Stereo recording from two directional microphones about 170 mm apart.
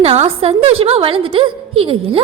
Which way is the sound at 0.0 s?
35° right (ahead or behind).